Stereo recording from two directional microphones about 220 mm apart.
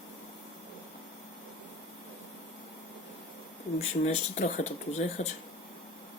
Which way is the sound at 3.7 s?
35° left (ahead or behind).